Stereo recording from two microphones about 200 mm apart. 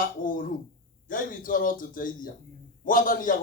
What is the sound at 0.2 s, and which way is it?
A man's voice, 45° left (ahead or behind).